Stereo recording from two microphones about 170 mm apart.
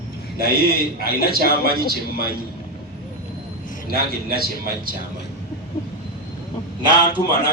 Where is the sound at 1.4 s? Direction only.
65° left (ahead or behind).